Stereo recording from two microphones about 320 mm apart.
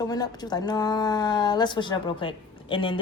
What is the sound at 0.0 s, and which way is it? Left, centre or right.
A woman's voice, centre.